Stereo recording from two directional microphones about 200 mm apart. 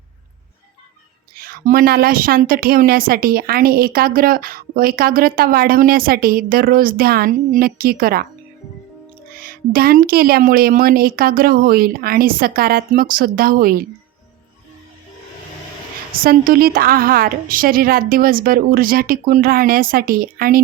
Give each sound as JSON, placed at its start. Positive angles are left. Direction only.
{"t": 1.4, "sound": "a woman's voice", "side_deg": -45}
{"t": 9.4, "sound": "a woman's voice", "side_deg": -45}
{"t": 16.2, "sound": "a woman's voice", "side_deg": -45}